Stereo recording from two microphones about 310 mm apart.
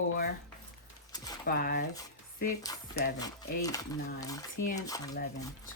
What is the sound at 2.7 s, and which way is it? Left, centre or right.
Stir, centre.